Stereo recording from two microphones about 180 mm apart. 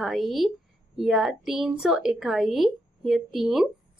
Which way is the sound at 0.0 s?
Centre (ahead or behind).